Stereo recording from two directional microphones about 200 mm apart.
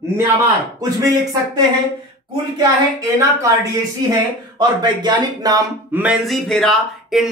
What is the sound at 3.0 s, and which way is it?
Speech, 15° right (ahead or behind).